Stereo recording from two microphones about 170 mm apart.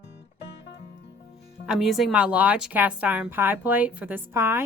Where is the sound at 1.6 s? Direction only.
Centre (ahead or behind).